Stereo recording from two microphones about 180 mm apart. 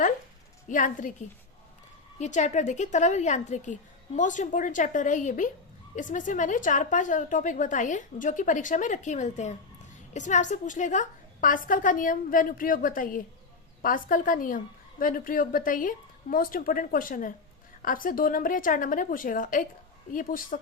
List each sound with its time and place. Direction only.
0.7 s a woman's voice: 45° left (ahead or behind)
2.1 s a woman's voice: 40° left (ahead or behind)